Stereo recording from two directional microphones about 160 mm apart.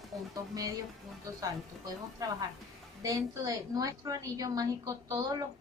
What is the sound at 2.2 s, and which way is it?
A woman's voice, 20° right (ahead or behind).